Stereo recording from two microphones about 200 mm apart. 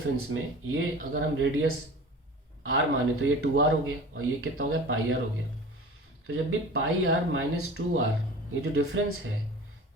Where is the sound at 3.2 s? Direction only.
90° right.